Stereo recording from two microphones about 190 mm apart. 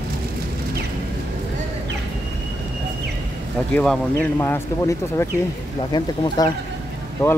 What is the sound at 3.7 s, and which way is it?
Speech, 5° left (ahead or behind).